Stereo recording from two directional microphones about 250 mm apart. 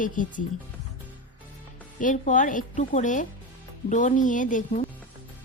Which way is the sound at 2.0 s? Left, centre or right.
Left.